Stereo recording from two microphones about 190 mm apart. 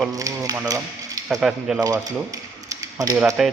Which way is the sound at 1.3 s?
5° right (ahead or behind).